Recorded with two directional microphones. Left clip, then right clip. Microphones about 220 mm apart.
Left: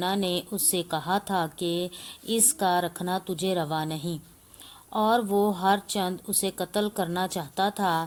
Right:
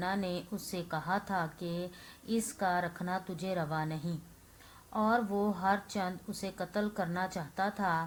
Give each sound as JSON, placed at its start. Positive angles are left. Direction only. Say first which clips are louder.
{"t": 0.3, "sound": "speech", "louder": "left 10 dB", "side_deg": 45}